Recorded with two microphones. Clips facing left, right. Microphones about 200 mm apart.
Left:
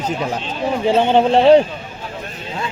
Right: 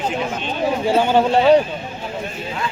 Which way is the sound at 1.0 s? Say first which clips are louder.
Left 3 dB; 25° left (ahead or behind).